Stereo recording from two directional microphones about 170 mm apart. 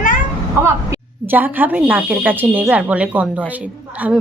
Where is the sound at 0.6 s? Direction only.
15° right (ahead or behind).